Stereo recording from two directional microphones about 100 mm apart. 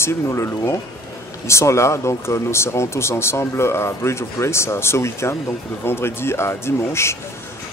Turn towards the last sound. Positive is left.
turn(degrees=25)  # may be behind; listen again after turning